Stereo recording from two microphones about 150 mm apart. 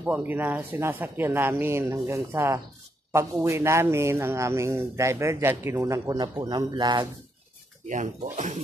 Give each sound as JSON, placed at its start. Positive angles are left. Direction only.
{"t": 0.0, "sound": "speech", "side_deg": -10}
{"t": 7.8, "sound": "speech", "side_deg": -55}